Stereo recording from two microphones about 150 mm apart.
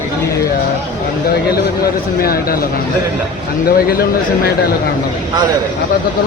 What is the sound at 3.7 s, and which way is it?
Speech, 85° left.